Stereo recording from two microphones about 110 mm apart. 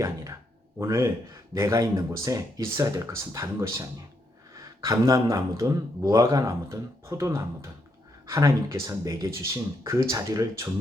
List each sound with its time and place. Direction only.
0.8 s a man's voice: 25° right (ahead or behind)